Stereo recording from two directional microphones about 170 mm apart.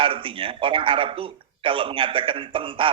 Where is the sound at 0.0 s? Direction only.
30° right (ahead or behind).